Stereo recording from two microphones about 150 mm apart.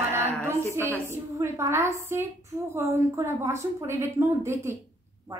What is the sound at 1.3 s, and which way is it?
A woman's voice, 20° right (ahead or behind).